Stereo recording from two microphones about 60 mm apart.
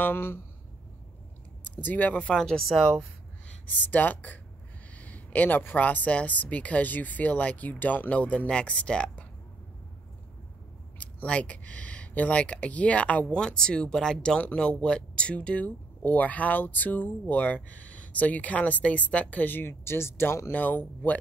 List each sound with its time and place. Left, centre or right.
0.0 s speech: left
1.8 s speech: left
2.3 s speech: centre
3.6 s speech: left
11.0 s speech: left
20.5 s speech: left